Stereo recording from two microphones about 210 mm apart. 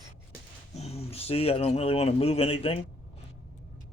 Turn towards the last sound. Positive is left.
turn(degrees=30)  # may be behind; listen again after turning